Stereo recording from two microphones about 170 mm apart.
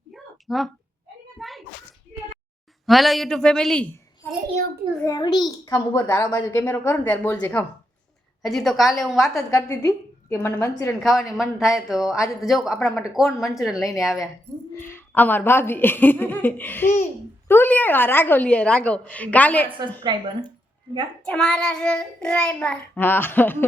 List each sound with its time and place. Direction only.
0.1 s a sound: centre (ahead or behind)
2.8 s a woman's voice: centre (ahead or behind)
4.9 s a child's voice: 20° left (ahead or behind); by 9.3 s centre (ahead or behind)
9.3 s a child's voice: 20° left (ahead or behind)
11.3 s a woman's voice: centre (ahead or behind)
14.8 s a child's voice: 15° left (ahead or behind)
20.1 s speech: 25° right (ahead or behind)
21.2 s a woman's voice: 5° left (ahead or behind)